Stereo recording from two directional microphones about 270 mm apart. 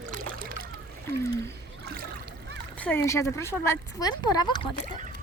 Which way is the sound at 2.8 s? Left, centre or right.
Centre.